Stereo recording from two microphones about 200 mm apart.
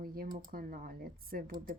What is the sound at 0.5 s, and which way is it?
A woman's voice, 45° right (ahead or behind).